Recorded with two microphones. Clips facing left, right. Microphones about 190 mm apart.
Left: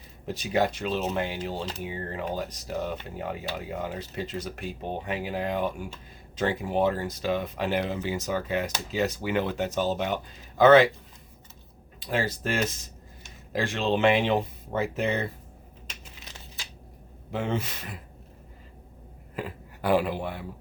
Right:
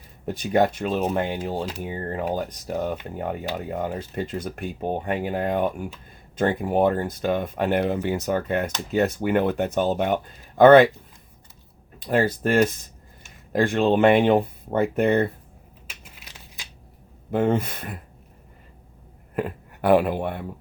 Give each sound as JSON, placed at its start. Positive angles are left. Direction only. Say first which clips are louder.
{"t": 0.3, "sound": "speech", "louder": "right 5 dB", "side_deg": -55}
{"t": 11.9, "sound": "speech", "louder": "right 7 dB", "side_deg": -55}
{"t": 17.3, "sound": "speech", "louder": "right 8 dB", "side_deg": -55}
{"t": 19.4, "sound": "speech", "louder": "right 7 dB", "side_deg": -60}